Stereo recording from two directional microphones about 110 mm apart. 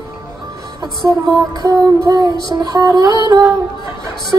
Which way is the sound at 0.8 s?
35° right (ahead or behind).